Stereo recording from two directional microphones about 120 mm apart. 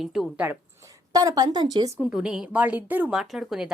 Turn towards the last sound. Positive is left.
turn(degrees=-5)  # may be behind; listen again after turning